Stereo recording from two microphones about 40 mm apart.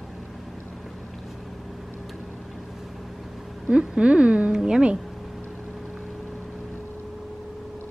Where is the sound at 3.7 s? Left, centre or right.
Right.